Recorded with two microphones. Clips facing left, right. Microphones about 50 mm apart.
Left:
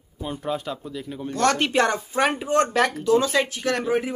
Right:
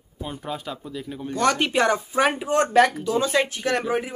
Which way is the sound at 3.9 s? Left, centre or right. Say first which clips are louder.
Left 2 dB; centre.